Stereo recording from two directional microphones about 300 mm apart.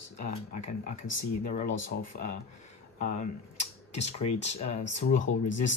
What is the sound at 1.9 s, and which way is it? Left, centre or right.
Speech, left.